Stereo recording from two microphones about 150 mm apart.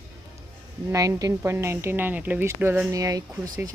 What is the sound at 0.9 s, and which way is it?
Speech, 20° right (ahead or behind).